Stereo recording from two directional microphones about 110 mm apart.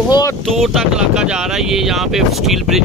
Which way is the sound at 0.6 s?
5° right (ahead or behind).